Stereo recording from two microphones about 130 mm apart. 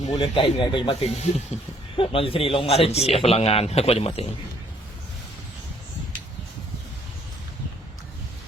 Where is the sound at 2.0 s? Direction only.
45° left (ahead or behind).